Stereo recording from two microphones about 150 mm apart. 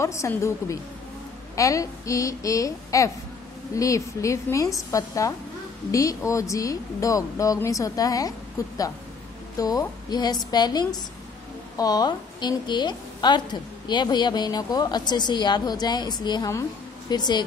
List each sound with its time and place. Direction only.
0.0 s a woman's voice: 20° left (ahead or behind)